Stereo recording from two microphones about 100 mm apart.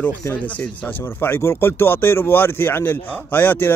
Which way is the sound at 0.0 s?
20° left (ahead or behind).